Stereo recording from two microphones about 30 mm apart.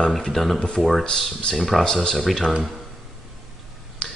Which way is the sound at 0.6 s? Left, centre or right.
Left.